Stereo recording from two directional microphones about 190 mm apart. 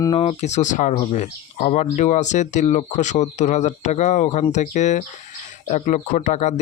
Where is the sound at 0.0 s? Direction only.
30° left (ahead or behind).